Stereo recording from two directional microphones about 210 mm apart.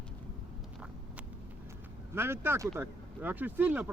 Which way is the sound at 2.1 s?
10° right (ahead or behind).